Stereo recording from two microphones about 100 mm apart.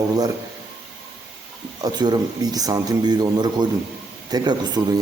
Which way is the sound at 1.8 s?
45° right (ahead or behind).